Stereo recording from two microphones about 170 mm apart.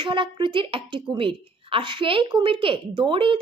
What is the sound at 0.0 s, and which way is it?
Speech, 30° right (ahead or behind).